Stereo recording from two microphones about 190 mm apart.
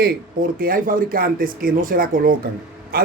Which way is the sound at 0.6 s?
50° right (ahead or behind).